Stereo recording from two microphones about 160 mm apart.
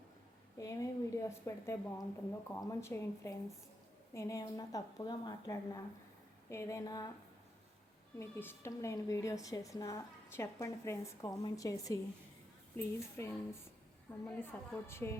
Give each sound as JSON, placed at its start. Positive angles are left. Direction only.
{"t": 0.5, "sound": "a woman's voice", "side_deg": 20}
{"t": 8.2, "sound": "a woman's voice", "side_deg": 15}